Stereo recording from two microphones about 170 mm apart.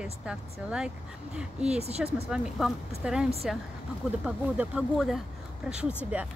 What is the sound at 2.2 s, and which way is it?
Speech, 5° right (ahead or behind).